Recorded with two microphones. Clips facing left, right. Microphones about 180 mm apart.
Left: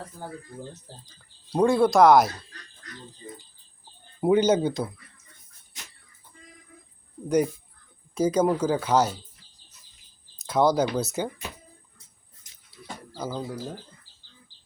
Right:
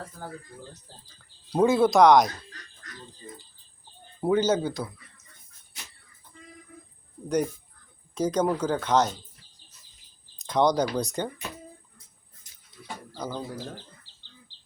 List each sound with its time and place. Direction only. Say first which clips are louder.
1.5 s speech: even; centre (ahead or behind)
4.2 s speech: left 3 dB; 15° left (ahead or behind)
7.3 s speech: left 3 dB; 10° left (ahead or behind)
10.4 s speech: left 1 dB; 5° left (ahead or behind)
13.1 s speech: left 2 dB; 5° left (ahead or behind)
14.5 s insect: right 1 dB; 25° right (ahead or behind)